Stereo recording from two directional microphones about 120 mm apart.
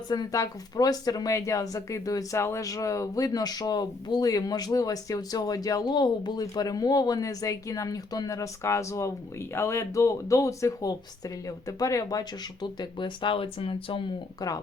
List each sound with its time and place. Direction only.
0.1 s speech: 35° left (ahead or behind)
12.8 s speech: 40° left (ahead or behind)